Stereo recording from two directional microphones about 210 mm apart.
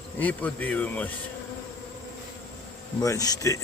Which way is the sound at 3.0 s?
15° left (ahead or behind).